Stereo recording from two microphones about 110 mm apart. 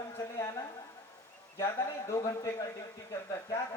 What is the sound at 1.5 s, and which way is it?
Speech, 25° left (ahead or behind).